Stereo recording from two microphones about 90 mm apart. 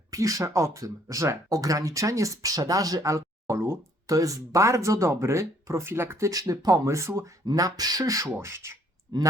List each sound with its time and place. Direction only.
0.1 s speech: 40° right (ahead or behind)
7.4 s speech: 45° right (ahead or behind)